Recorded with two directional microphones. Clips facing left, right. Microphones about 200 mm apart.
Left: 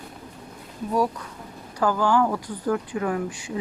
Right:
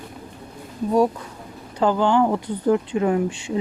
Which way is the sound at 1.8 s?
25° right (ahead or behind).